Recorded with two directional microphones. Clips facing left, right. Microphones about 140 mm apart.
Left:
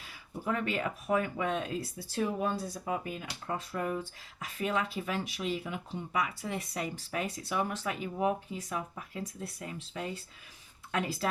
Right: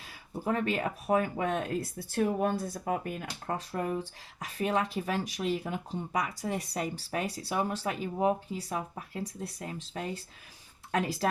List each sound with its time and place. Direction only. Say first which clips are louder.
0.4 s speech: right 2 dB; 35° right (ahead or behind)